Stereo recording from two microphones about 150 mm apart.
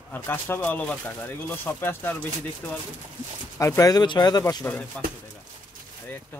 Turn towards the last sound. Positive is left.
turn(degrees=10)  # may be behind; listen again after turning